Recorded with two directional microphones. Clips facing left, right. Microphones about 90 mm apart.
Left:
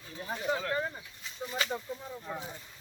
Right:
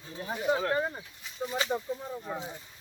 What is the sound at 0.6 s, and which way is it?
Speech, 25° right (ahead or behind).